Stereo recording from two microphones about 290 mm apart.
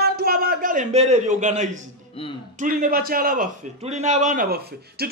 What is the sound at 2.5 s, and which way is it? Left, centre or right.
A man's voice, right.